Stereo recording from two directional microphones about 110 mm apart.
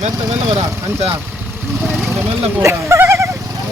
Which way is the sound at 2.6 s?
25° right (ahead or behind).